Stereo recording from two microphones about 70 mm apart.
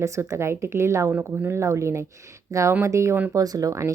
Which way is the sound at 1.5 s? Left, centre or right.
Right.